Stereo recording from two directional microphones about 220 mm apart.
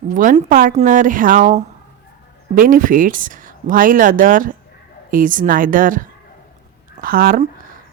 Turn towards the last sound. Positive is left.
turn(degrees=-40)  # may be behind; listen again after turning